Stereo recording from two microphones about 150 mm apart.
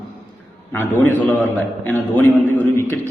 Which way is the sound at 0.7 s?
15° left (ahead or behind).